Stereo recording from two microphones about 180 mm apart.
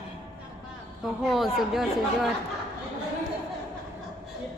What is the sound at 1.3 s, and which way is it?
Speech, centre (ahead or behind).